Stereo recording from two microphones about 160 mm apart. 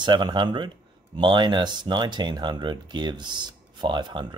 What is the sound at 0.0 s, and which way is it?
Speech, 30° right (ahead or behind).